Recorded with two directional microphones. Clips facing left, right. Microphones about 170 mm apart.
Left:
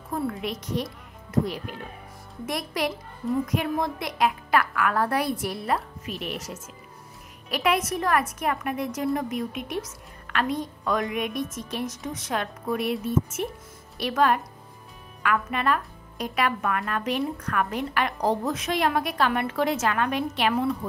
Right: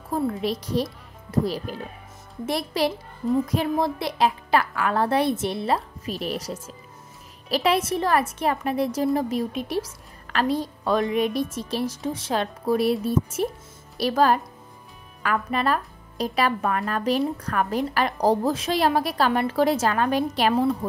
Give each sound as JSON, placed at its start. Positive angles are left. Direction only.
{"t": 0.1, "sound": "a woman's voice", "side_deg": -30}